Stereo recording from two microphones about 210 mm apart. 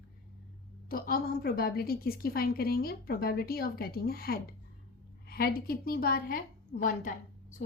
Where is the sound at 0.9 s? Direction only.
45° left (ahead or behind).